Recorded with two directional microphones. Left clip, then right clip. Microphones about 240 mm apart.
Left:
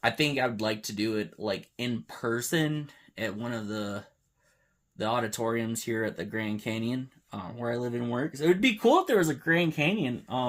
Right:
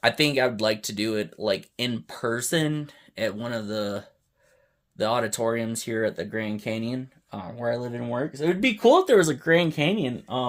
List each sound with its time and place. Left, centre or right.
0.0 s speech: right